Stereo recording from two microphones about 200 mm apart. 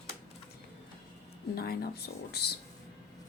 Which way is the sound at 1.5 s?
50° left (ahead or behind).